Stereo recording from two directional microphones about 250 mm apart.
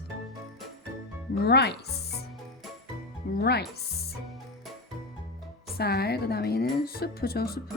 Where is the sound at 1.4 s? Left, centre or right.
Left.